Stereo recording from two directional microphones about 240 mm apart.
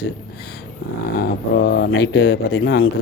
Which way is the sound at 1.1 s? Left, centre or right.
Left.